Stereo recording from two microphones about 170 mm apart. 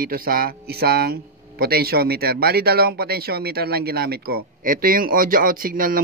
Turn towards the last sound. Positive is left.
turn(degrees=-55)  # may be behind; listen again after turning